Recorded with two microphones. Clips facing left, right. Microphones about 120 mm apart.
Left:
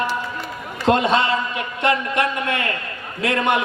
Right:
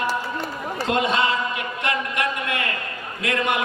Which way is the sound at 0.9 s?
35° left (ahead or behind).